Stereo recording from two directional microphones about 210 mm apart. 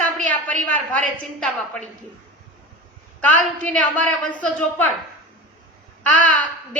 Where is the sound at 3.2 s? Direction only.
5° left (ahead or behind).